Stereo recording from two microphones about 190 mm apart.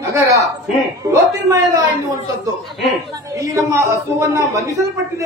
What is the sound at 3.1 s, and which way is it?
A man's voice, 20° right (ahead or behind).